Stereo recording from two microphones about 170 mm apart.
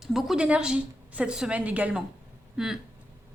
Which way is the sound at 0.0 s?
Centre (ahead or behind).